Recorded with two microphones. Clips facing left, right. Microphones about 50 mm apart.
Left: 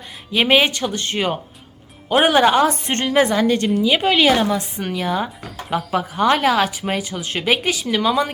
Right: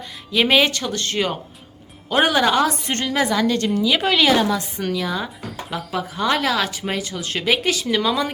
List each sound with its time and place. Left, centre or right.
0.3 s a woman's voice: centre